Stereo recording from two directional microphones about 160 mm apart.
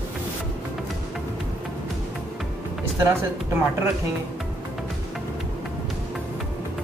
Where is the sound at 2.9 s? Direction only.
15° right (ahead or behind).